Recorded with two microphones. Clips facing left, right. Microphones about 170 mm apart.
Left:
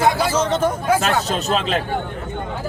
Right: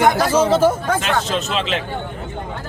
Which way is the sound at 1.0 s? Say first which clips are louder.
Even; 40° left (ahead or behind).